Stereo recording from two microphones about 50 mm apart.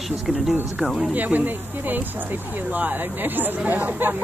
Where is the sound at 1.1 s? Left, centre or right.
Right.